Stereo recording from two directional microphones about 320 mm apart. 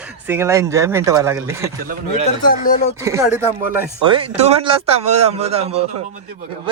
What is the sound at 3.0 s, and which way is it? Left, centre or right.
A man's voice, centre.